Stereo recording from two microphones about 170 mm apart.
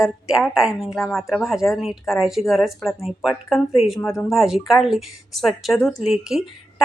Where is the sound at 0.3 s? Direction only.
5° right (ahead or behind).